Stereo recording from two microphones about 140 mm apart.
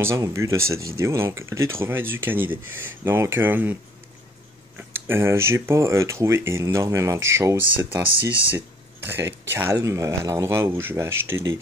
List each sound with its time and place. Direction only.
0.0 s speech: 20° right (ahead or behind)
4.7 s speech: 15° right (ahead or behind)